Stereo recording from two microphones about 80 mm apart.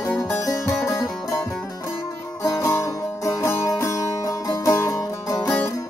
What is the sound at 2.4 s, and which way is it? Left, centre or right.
Music, left.